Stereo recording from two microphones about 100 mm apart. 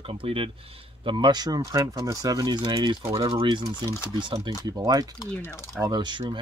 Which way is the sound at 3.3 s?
55° right (ahead or behind).